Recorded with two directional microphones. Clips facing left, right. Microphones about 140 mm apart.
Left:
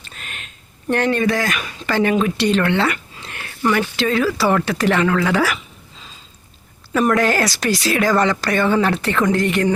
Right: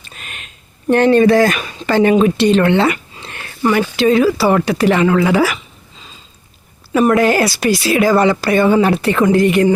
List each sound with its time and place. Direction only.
0.0 s a sound: 15° right (ahead or behind)
3.7 s speech: 15° right (ahead or behind)
6.9 s speech: 10° right (ahead or behind)